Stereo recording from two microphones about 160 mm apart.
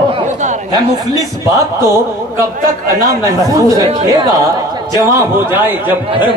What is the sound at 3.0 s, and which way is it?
Speech, 20° right (ahead or behind).